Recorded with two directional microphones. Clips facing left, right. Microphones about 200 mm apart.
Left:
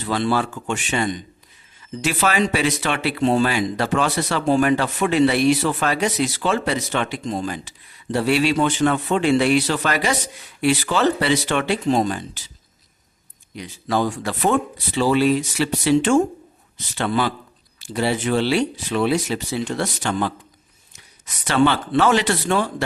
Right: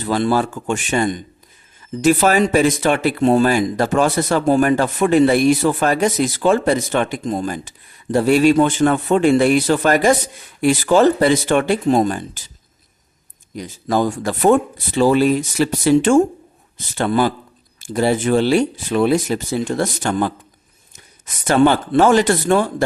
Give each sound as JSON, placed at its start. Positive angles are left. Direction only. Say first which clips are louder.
{"t": 0.0, "sound": "speech", "louder": "right 4 dB", "side_deg": -45}
{"t": 13.6, "sound": "speech", "louder": "right 3 dB", "side_deg": -45}